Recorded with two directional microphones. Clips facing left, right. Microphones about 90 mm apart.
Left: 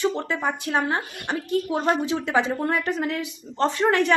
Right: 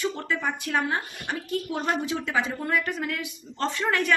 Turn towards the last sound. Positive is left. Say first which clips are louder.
# left 5 dB
turn(degrees=25)  # may be behind; listen again after turning